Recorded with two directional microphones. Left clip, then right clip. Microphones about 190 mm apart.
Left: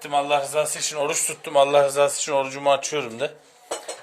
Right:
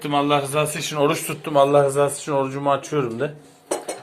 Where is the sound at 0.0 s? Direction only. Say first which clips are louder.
Right 2 dB; 25° left (ahead or behind).